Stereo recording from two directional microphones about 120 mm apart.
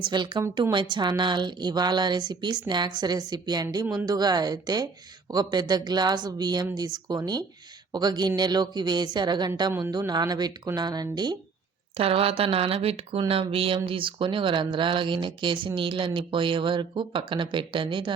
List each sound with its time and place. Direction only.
0.1 s a woman's voice: 40° right (ahead or behind)
11.9 s speech: 55° right (ahead or behind)